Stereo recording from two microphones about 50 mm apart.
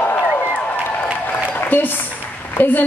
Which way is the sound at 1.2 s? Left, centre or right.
Left.